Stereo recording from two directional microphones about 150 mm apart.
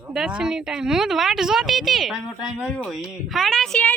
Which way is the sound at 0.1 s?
5° right (ahead or behind).